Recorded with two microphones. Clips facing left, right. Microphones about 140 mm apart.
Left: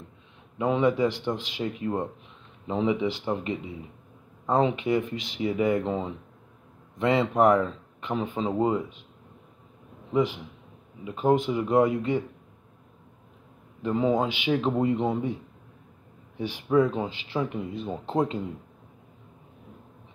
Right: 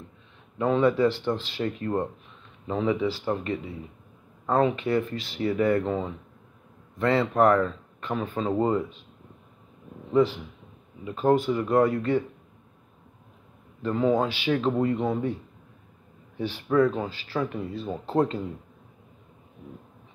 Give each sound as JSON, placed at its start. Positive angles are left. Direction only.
{"t": 0.6, "sound": "speech", "side_deg": 15}
{"t": 10.1, "sound": "speech", "side_deg": 15}
{"t": 13.8, "sound": "speech", "side_deg": 15}
{"t": 16.3, "sound": "speech", "side_deg": 15}